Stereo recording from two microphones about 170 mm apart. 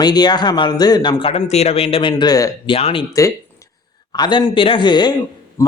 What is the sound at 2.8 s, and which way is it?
Speech, 35° left (ahead or behind).